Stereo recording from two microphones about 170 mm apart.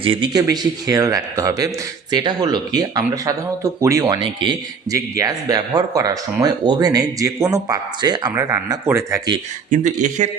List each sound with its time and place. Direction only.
0.0 s a man's voice: 30° right (ahead or behind)
9.6 s speech: 50° right (ahead or behind)